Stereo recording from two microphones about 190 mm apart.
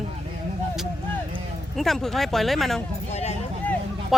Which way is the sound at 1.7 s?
Centre (ahead or behind).